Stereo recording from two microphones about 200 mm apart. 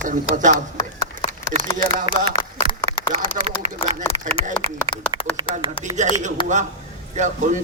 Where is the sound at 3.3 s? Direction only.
30° right (ahead or behind).